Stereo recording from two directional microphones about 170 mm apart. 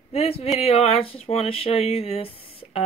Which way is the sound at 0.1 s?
35° left (ahead or behind).